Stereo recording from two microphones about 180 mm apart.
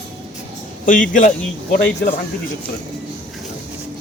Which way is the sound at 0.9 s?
50° left (ahead or behind).